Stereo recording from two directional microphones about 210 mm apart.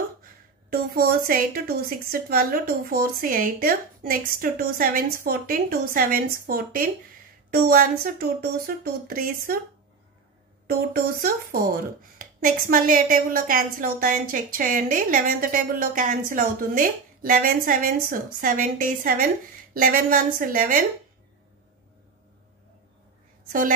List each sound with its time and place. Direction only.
0.2 s a woman's voice: 45° right (ahead or behind)
10.7 s speech: 45° right (ahead or behind)